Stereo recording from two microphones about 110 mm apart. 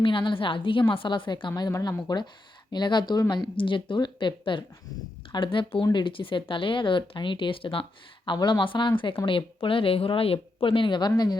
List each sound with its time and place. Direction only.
0.0 s speech: 50° left (ahead or behind)
8.2 s speech: 40° left (ahead or behind)